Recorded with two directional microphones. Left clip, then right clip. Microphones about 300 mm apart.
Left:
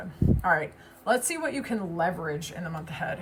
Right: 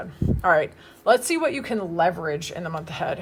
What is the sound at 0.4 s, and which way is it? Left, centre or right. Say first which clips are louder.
Speech: right 7 dB; centre.